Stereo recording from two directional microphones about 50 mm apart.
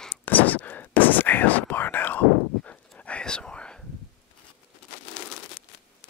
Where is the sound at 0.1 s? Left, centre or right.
Left.